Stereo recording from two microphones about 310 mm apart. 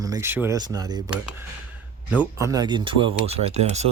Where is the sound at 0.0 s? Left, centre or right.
Centre.